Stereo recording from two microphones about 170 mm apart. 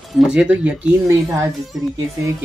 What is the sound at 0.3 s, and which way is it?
Speech, 5° right (ahead or behind).